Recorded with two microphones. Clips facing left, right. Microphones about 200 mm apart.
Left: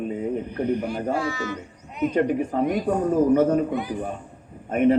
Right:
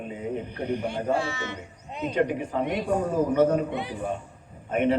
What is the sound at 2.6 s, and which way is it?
Speech, 25° right (ahead or behind).